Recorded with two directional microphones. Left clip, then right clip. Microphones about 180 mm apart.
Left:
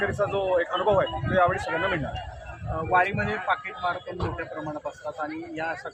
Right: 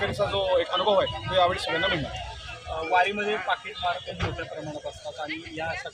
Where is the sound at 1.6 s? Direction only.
35° left (ahead or behind).